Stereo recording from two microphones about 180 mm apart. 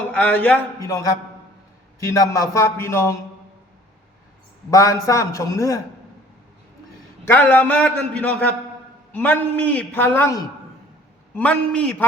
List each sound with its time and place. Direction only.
0.1 s a man's voice: 5° left (ahead or behind)
0.8 s a man's voice: 20° left (ahead or behind)
4.7 s a man's voice: 20° left (ahead or behind)
7.3 s a man's voice: 10° left (ahead or behind)